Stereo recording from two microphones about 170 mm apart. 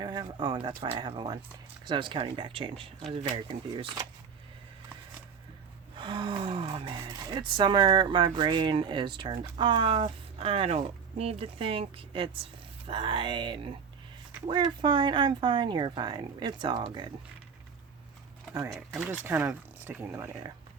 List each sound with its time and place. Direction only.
0.0 s speech: 25° right (ahead or behind)
6.0 s speech: 30° right (ahead or behind)
18.5 s speech: 15° right (ahead or behind)